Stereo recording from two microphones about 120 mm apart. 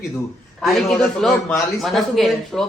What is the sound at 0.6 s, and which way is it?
A man's voice, centre (ahead or behind).